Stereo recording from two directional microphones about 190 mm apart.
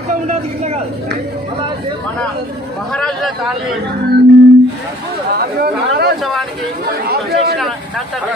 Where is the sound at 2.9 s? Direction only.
Centre (ahead or behind).